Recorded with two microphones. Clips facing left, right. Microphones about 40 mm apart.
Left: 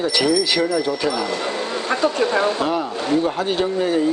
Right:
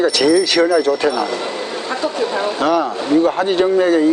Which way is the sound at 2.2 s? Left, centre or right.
Centre.